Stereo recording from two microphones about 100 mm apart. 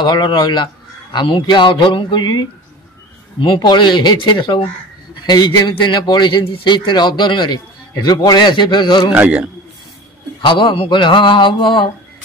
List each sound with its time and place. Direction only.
0.0 s a man's voice: 50° left (ahead or behind)
3.5 s a man's voice: 50° left (ahead or behind)
9.1 s a man's voice: 15° right (ahead or behind)
10.4 s a man's voice: 55° left (ahead or behind)